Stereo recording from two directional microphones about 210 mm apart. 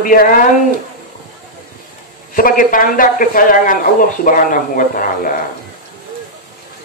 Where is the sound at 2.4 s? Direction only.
40° left (ahead or behind).